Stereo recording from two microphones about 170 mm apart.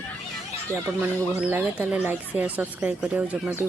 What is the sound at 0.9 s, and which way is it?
Speech, 10° right (ahead or behind).